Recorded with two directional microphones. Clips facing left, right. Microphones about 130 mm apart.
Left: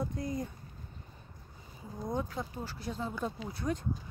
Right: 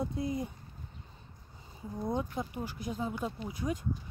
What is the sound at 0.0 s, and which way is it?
Speech, 25° right (ahead or behind).